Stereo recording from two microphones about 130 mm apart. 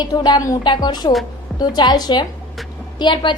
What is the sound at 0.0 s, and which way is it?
A woman's voice, 30° left (ahead or behind).